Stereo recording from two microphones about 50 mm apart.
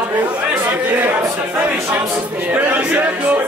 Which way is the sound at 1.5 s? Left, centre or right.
Right.